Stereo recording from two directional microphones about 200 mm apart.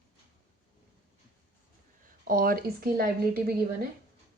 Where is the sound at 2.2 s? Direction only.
45° right (ahead or behind).